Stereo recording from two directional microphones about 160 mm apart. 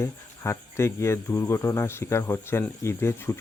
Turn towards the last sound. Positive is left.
turn(degrees=15)  # may be behind; listen again after turning